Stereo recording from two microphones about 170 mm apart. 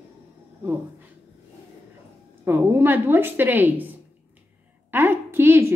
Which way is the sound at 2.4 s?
15° right (ahead or behind).